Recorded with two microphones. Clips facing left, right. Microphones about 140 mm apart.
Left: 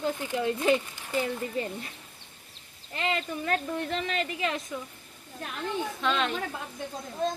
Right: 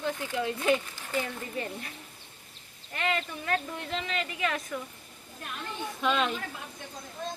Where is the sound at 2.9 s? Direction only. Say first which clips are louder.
Left 1 dB; 30° left (ahead or behind).